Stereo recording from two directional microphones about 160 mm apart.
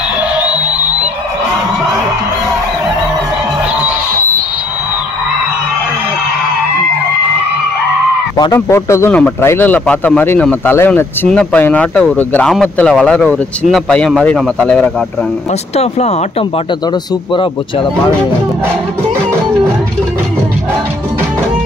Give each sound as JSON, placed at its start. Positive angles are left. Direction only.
{"t": 0.4, "sound": "music", "side_deg": -10}
{"t": 8.5, "sound": "speech", "side_deg": 15}
{"t": 15.7, "sound": "speech", "side_deg": 40}
{"t": 17.3, "sound": "speech", "side_deg": 30}